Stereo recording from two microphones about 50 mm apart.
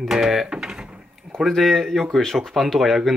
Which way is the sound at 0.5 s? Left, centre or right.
Centre.